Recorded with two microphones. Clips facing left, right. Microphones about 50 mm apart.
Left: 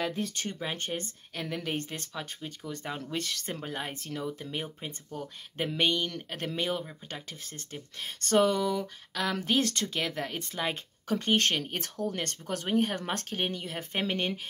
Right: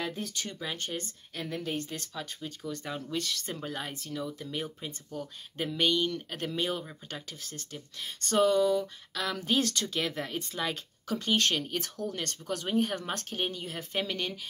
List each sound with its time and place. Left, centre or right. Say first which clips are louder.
0.3 s speech: left 2 dB; left
3.6 s speech: left 1 dB; left
6.4 s speech: left 1 dB; left
8.1 s speech: even; left
8.8 s speech: left 2 dB; left